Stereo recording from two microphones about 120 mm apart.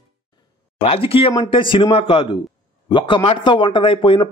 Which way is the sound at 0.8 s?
50° left (ahead or behind).